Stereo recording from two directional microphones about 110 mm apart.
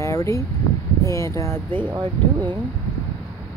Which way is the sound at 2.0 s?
45° right (ahead or behind).